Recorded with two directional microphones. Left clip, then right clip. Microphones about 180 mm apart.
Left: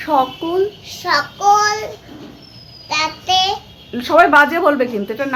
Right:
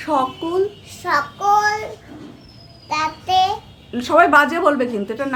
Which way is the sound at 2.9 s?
15° right (ahead or behind).